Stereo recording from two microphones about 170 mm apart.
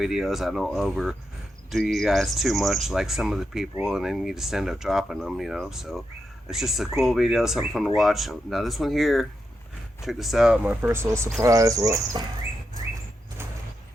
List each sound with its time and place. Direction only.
0.0 s speech: centre (ahead or behind); by 12.2 s 20° right (ahead or behind)